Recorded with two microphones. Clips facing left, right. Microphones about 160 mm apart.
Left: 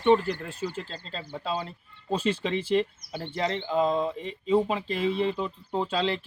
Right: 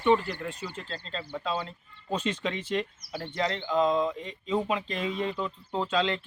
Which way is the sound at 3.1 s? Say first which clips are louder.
Left 1 dB; 25° left (ahead or behind).